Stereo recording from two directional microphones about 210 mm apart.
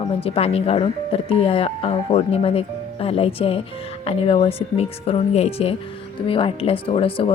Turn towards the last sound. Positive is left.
turn(degrees=25)  # may be behind; listen again after turning